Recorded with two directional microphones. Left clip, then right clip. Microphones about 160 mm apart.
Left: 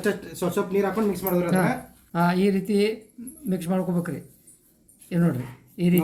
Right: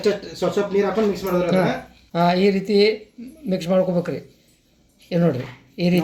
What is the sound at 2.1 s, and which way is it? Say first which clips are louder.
A woman's voice: right 5 dB; 15° right (ahead or behind).